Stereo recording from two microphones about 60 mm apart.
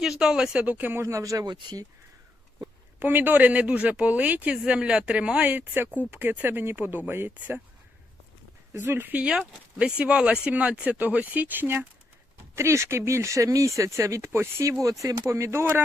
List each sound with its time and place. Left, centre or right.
0.2 s speech: centre
0.6 s speech: right
1.0 s speech: right
3.0 s speech: right
7.3 s speech: right
8.7 s speech: right
9.5 s speech: centre; by 11.9 s right
12.5 s speech: right